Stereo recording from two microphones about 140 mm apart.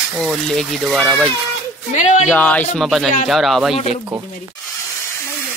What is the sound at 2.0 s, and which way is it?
Speech, 55° left (ahead or behind).